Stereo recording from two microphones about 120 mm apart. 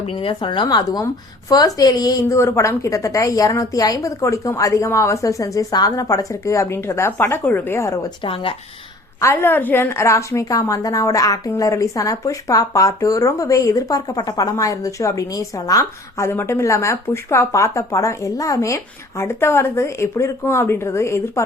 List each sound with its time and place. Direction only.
0.0 s a woman's voice: 50° left (ahead or behind); by 7.9 s 20° left (ahead or behind)
8.2 s speech: 45° left (ahead or behind)
9.2 s a woman's voice: 20° left (ahead or behind)